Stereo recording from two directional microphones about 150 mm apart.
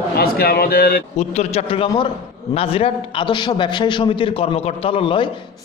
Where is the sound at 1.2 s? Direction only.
45° left (ahead or behind).